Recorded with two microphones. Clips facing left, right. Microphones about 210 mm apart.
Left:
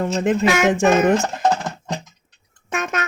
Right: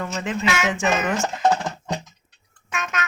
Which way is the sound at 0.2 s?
45° left (ahead or behind).